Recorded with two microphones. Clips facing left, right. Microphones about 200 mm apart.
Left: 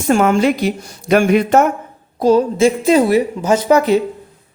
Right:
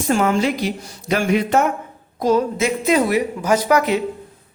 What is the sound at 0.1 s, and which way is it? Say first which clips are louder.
A woman's voice: left 5 dB; 60° left (ahead or behind).